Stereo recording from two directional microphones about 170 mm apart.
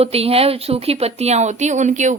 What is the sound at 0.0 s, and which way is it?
A woman's voice, 35° right (ahead or behind).